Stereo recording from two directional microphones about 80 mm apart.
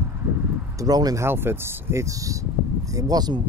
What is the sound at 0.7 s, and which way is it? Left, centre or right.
Speech, right.